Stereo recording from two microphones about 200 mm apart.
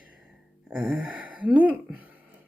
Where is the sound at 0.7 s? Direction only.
5° right (ahead or behind).